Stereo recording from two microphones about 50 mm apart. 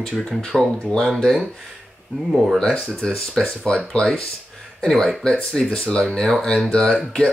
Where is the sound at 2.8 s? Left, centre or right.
Centre.